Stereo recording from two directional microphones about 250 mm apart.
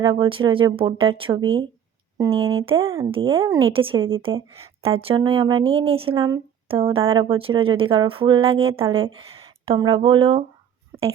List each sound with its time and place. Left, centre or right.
0.0 s speech: centre